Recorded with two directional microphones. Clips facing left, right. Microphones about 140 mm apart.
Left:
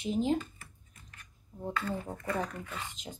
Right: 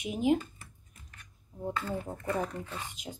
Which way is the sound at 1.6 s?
10° right (ahead or behind).